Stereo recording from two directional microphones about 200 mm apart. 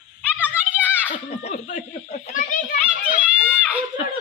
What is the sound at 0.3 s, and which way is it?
Children playing, 5° right (ahead or behind).